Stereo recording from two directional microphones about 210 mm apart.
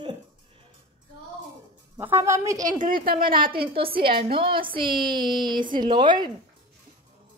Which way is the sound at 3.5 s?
25° right (ahead or behind).